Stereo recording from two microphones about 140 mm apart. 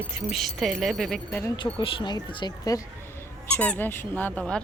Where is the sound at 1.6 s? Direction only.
35° left (ahead or behind).